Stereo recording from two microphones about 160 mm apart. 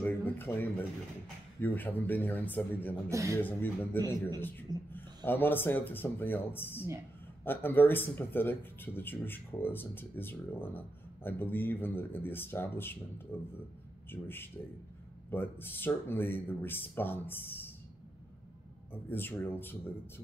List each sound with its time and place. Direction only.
0.0 s a sound: 10° left (ahead or behind)
1.6 s speech: 10° left (ahead or behind)
3.1 s speech: 20° right (ahead or behind)
3.3 s speech: 10° left (ahead or behind)
19.0 s speech: 15° left (ahead or behind)